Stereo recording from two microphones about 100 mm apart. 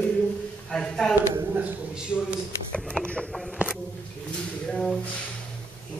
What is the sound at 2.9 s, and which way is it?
Speech, 10° left (ahead or behind).